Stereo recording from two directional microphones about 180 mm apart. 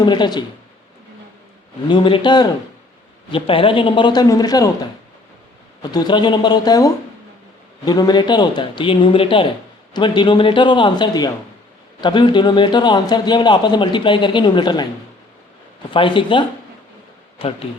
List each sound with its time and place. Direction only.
0.0 s a man's voice: 25° left (ahead or behind)
1.9 s a man's voice: 25° left (ahead or behind)
5.8 s a man's voice: 20° left (ahead or behind)
15.9 s a man's voice: 30° left (ahead or behind)